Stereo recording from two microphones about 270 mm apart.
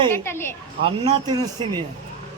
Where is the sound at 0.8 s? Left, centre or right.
Centre.